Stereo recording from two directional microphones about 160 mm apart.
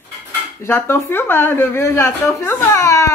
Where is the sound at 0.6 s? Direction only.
15° left (ahead or behind).